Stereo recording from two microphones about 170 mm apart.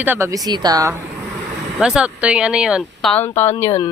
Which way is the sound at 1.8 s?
5° right (ahead or behind).